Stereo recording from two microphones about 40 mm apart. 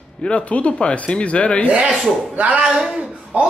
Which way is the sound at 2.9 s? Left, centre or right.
Right.